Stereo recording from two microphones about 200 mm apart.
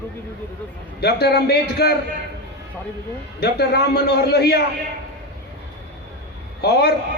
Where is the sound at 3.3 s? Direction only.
55° left (ahead or behind).